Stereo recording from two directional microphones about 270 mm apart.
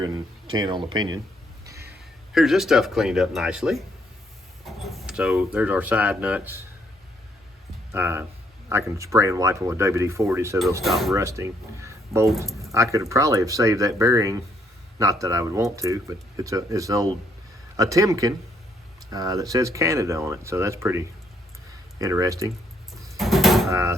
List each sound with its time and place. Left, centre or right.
0.0 s speech: centre
2.3 s speech: centre
7.9 s speech: centre
10.8 s speech: centre
11.1 s speech: centre
23.1 s a sound: centre
23.6 s speech: centre